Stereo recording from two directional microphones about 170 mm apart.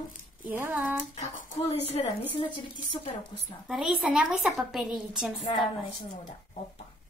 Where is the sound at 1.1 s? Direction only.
50° left (ahead or behind).